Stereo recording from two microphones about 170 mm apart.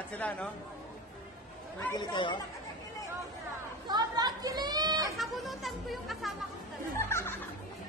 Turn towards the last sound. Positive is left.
turn(degrees=15)  # may be behind; listen again after turning